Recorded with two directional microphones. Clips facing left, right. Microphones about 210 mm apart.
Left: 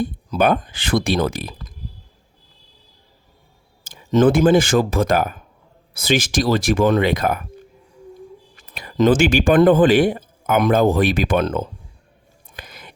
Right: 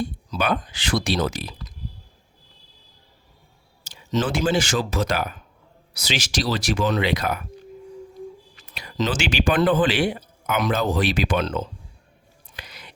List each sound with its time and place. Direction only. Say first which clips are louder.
0.0 s speech: left 7 dB; 55° left (ahead or behind)
3.9 s a man's voice: left 9 dB; 55° left (ahead or behind)
8.7 s a man's voice: left 10 dB; 50° left (ahead or behind)
12.5 s whispering: left 3 dB; 50° left (ahead or behind)